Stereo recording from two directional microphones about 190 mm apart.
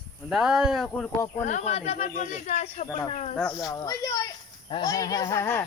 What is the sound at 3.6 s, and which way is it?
A child's voice, 20° left (ahead or behind).